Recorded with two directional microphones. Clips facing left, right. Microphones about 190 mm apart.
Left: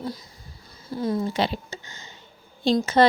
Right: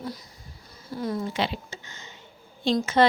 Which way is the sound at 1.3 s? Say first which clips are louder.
Left 3 dB; 40° left (ahead or behind).